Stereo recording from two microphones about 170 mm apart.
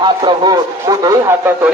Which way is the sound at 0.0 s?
25° right (ahead or behind).